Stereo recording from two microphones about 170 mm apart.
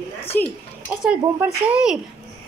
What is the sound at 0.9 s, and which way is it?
Speech, 5° right (ahead or behind).